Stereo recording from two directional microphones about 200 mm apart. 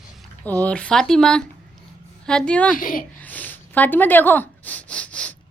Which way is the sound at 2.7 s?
45° left (ahead or behind).